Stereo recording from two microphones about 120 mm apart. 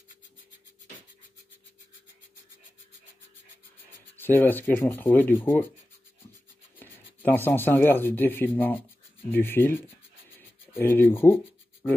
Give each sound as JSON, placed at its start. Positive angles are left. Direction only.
{"t": 4.2, "sound": "rub", "side_deg": 15}
{"t": 6.8, "sound": "speech", "side_deg": 15}
{"t": 9.3, "sound": "rub", "side_deg": 20}